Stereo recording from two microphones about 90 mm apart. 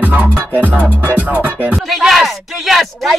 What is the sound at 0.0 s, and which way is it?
Music, 20° right (ahead or behind).